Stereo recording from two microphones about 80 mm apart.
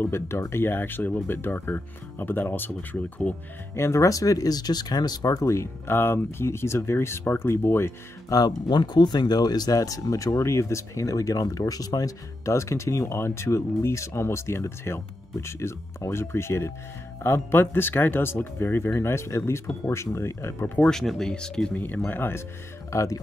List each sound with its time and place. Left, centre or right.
0.0 s speech: left
3.7 s speech: left
8.3 s speech: left
20.7 s speech: centre
21.7 s speech: left
22.8 s speech: left